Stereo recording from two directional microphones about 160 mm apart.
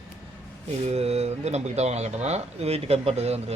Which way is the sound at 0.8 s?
40° right (ahead or behind).